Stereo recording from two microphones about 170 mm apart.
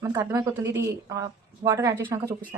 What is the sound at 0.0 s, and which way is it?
A woman's voice, 20° right (ahead or behind).